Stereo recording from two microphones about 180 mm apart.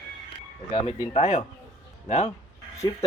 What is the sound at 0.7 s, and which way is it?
Speech, 35° left (ahead or behind).